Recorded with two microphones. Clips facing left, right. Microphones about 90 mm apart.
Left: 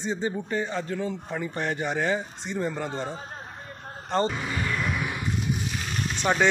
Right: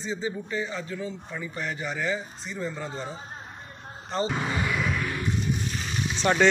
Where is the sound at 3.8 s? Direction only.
55° left (ahead or behind).